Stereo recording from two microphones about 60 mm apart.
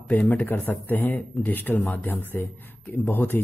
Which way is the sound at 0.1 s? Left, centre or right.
Left.